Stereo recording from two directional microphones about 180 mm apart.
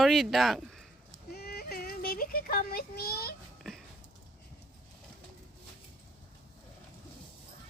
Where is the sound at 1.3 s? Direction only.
60° left (ahead or behind).